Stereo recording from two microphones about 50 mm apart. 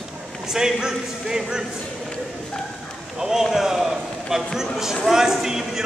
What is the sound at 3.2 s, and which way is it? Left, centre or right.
Run, centre.